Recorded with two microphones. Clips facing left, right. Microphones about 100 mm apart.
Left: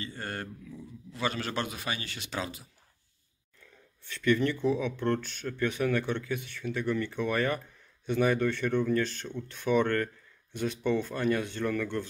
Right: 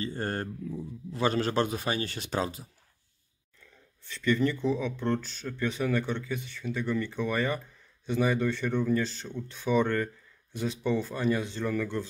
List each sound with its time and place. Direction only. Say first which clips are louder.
0.0 s a man's voice: right 5 dB; 40° right (ahead or behind)
4.0 s speech: even; centre (ahead or behind)